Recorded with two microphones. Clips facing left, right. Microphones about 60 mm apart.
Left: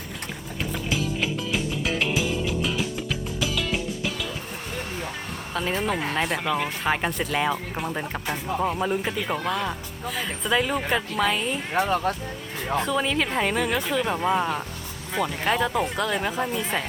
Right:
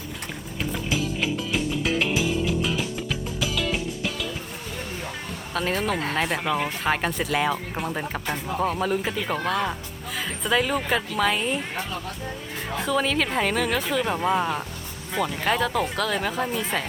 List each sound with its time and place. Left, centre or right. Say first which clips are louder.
0.6 s music: right 1 dB; centre
5.5 s speech: right 1 dB; centre
12.6 s speech: even; centre